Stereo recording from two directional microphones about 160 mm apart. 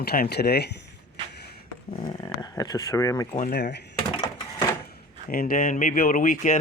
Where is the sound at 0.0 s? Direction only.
80° left.